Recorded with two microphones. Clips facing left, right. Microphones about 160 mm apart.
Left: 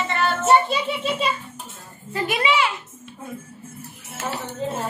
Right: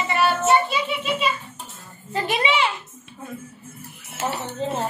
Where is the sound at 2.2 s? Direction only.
25° right (ahead or behind).